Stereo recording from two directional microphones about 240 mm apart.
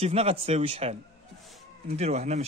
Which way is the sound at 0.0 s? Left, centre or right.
Right.